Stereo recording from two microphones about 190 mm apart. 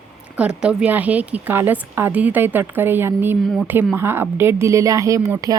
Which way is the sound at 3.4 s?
Centre (ahead or behind).